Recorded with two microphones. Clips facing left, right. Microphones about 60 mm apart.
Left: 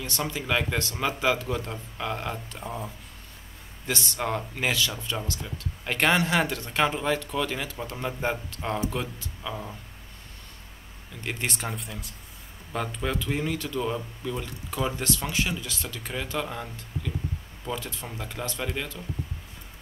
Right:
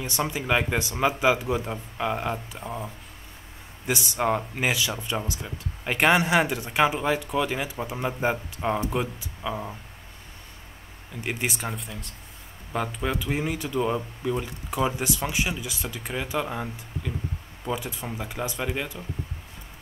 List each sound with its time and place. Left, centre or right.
0.0 s speech: centre
3.8 s speech: centre
11.1 s speech: centre
11.5 s speech: centre